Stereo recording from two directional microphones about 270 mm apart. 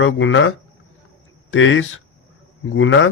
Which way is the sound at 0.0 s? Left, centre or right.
Left.